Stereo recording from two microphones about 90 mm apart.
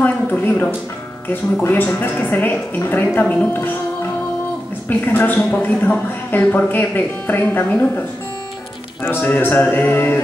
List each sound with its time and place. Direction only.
0.0 s a sound: 20° left (ahead or behind)
1.3 s speech: 20° left (ahead or behind)
4.8 s speech: 20° left (ahead or behind)
9.0 s speech: 20° left (ahead or behind)